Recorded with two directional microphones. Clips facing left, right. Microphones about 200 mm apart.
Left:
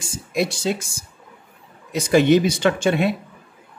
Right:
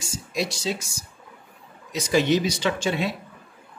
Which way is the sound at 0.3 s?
55° left (ahead or behind).